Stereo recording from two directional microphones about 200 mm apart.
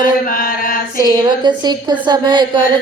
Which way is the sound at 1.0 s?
20° right (ahead or behind).